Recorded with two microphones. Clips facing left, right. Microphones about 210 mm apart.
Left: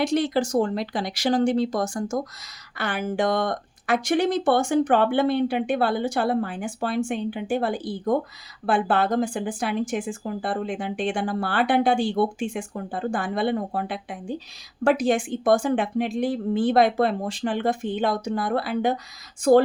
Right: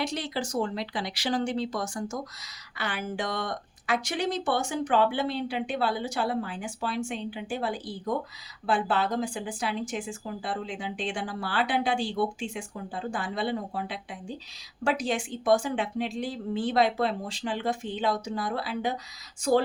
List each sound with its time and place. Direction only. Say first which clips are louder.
0.0 s speech: left 9 dB; 50° left (ahead or behind)